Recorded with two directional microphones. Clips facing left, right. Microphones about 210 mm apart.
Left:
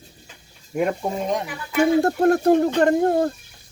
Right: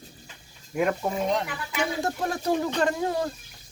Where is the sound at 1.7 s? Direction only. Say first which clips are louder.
Left 12 dB; 60° left (ahead or behind).